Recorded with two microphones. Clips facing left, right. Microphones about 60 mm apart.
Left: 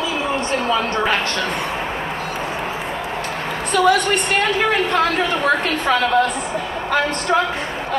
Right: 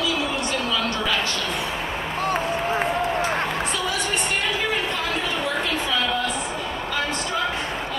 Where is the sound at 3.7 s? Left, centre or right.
Left.